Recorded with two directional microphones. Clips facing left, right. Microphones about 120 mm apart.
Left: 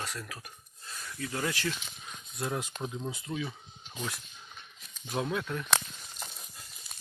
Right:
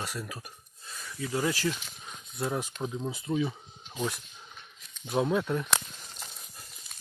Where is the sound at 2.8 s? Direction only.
15° right (ahead or behind).